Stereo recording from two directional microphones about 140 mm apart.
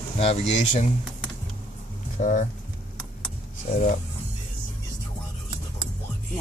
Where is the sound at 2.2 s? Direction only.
65° left (ahead or behind).